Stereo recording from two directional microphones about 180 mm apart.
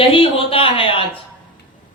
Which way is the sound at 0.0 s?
30° left (ahead or behind).